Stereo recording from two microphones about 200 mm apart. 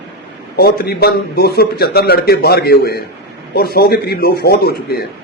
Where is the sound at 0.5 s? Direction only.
50° left (ahead or behind).